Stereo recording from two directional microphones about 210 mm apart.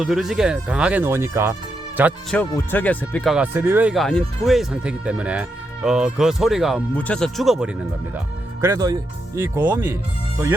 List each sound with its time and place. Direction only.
0.0 s speech: centre (ahead or behind)
2.3 s speech: 10° left (ahead or behind)
3.3 s speech: 10° right (ahead or behind)
8.6 s speech: 15° right (ahead or behind)